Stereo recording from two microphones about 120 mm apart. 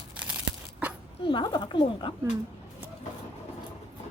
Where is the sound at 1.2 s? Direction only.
40° left (ahead or behind).